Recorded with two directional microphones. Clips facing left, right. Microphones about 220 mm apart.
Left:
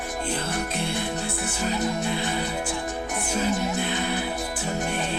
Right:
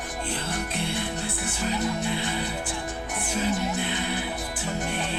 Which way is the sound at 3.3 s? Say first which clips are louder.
Left 1 dB; 45° left (ahead or behind).